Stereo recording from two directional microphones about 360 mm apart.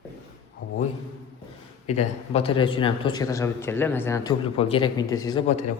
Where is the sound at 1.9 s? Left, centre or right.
Centre.